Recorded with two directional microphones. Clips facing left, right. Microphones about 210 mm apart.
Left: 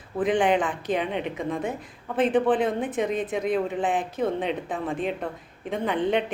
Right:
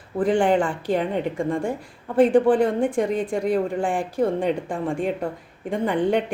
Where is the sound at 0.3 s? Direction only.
20° left (ahead or behind).